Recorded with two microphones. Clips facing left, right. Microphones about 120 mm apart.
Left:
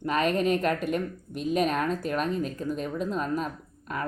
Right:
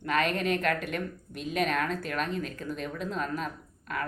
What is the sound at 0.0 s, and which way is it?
Speech, 30° left (ahead or behind).